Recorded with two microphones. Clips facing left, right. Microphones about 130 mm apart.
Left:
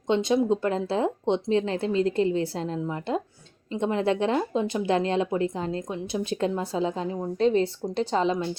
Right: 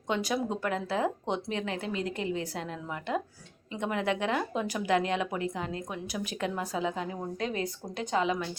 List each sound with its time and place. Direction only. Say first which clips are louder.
0.1 s speech: left 8 dB; 25° left (ahead or behind)